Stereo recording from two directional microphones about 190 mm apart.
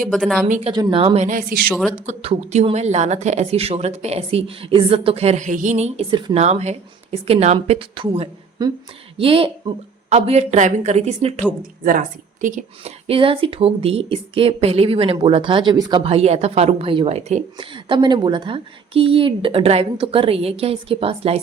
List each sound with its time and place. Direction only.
0.1 s a woman's voice: centre (ahead or behind)
0.4 s speech: 40° right (ahead or behind)
0.7 s speech: 25° right (ahead or behind); by 1.5 s 45° right (ahead or behind)
1.6 s a woman's voice: centre (ahead or behind)
2.0 s speech: 35° right (ahead or behind)
11.8 s a woman's voice: 45° right (ahead or behind)
13.1 s speech: 30° right (ahead or behind)